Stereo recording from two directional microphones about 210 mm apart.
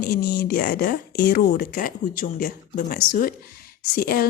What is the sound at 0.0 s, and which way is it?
A woman's voice, 45° left (ahead or behind).